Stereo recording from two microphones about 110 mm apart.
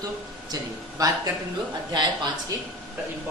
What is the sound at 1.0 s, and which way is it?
Speech, 35° right (ahead or behind).